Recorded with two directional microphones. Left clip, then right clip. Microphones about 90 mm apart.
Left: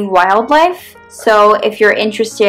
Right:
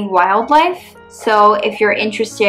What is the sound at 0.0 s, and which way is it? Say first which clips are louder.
Speech: left 3 dB; 40° left (ahead or behind).